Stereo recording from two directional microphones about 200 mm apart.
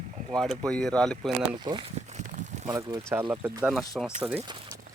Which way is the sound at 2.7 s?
20° right (ahead or behind).